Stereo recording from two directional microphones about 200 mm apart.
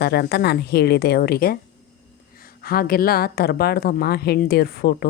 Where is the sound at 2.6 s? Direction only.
50° left (ahead or behind).